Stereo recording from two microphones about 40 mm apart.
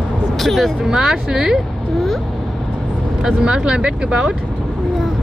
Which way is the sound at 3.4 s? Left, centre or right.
Centre.